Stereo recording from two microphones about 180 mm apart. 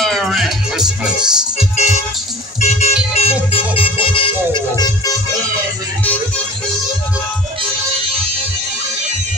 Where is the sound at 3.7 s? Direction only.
30° left (ahead or behind).